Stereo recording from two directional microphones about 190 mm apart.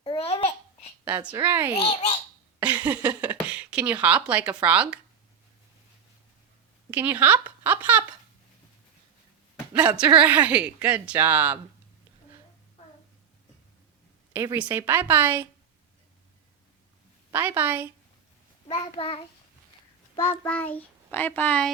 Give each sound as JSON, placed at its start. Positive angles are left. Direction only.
{"t": 0.0, "sound": "babbling", "side_deg": 30}
{"t": 1.0, "sound": "a woman's voice", "side_deg": -10}
{"t": 1.7, "sound": "child singing", "side_deg": 30}
{"t": 2.6, "sound": "speech", "side_deg": -10}
{"t": 6.9, "sound": "speech", "side_deg": -10}
{"t": 9.7, "sound": "speech", "side_deg": -5}
{"t": 14.3, "sound": "speech", "side_deg": -10}
{"t": 17.3, "sound": "speech", "side_deg": -10}
{"t": 18.7, "sound": "child singing", "side_deg": 30}
{"t": 20.4, "sound": "a child's voice", "side_deg": 10}